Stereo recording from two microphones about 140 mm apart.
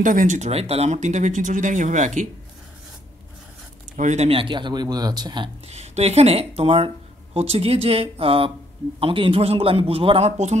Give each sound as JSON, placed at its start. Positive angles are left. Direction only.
{"t": 0.0, "sound": "speech", "side_deg": -65}
{"t": 3.9, "sound": "speech", "side_deg": -60}
{"t": 5.7, "sound": "a man's voice", "side_deg": -50}